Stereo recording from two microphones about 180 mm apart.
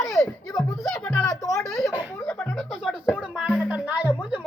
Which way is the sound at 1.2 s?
20° left (ahead or behind).